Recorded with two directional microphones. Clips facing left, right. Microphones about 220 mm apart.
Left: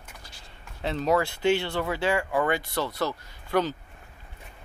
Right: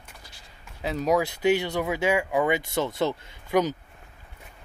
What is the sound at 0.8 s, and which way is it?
Speech, 5° right (ahead or behind).